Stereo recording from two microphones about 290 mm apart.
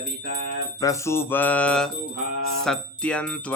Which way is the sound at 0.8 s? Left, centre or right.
Centre.